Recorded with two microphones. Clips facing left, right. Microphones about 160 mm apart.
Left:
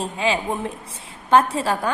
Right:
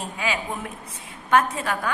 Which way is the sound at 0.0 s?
30° left (ahead or behind).